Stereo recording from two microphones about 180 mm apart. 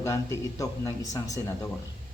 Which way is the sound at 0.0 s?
15° left (ahead or behind).